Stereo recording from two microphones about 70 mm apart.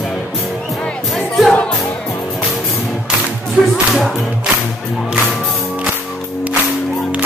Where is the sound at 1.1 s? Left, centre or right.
Centre.